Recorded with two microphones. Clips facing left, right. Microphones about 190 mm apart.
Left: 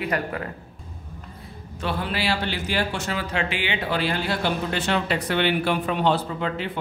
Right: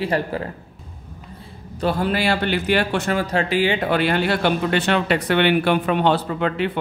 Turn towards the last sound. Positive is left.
turn(degrees=-65)  # may be behind; listen again after turning